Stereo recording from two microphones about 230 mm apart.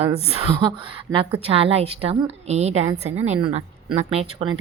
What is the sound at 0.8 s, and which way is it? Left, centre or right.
A woman's voice, right.